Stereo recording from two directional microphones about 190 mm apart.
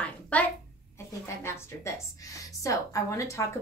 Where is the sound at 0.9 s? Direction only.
15° left (ahead or behind).